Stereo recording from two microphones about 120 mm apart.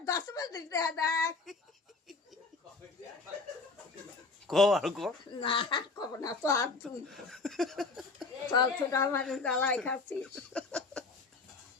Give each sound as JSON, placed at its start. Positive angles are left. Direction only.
{"t": 0.0, "sound": "a woman's voice", "side_deg": 30}
{"t": 4.4, "sound": "speech", "side_deg": 0}
{"t": 5.3, "sound": "speech", "side_deg": 45}
{"t": 6.1, "sound": "a woman's voice", "side_deg": 25}
{"t": 6.8, "sound": "speech", "side_deg": 0}
{"t": 8.5, "sound": "a woman's voice", "side_deg": 25}
{"t": 9.2, "sound": "speech", "side_deg": 5}
{"t": 10.2, "sound": "laughter", "side_deg": 10}